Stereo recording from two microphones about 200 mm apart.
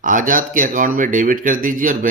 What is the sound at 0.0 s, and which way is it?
Speech, 40° right (ahead or behind).